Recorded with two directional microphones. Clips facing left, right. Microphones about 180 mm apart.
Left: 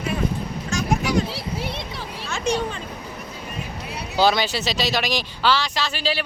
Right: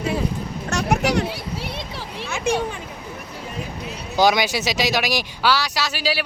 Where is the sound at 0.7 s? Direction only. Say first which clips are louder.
Right 2 dB; 70° right (ahead or behind).